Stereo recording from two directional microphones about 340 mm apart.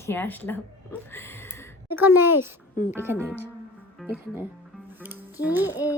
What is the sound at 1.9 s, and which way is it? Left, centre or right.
A child's voice, centre.